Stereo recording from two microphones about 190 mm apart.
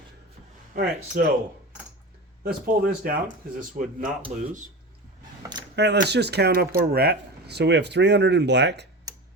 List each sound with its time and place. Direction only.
0.8 s speech: 50° right (ahead or behind)
2.4 s speech: 50° right (ahead or behind)
5.7 s speech: 60° right (ahead or behind)